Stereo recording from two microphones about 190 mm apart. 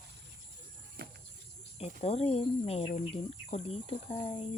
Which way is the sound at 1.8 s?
30° left (ahead or behind).